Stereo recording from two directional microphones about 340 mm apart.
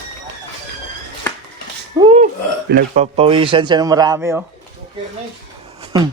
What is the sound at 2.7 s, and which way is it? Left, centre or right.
Speech, right.